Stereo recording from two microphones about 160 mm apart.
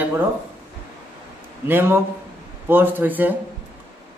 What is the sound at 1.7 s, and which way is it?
Speech, 15° right (ahead or behind).